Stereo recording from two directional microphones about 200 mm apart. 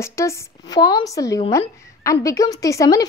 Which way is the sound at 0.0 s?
15° left (ahead or behind).